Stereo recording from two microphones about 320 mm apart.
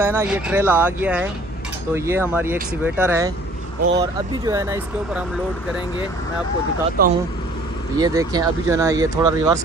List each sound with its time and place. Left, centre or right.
0.0 s speech: centre
7.0 s speech: right
8.0 s speech: centre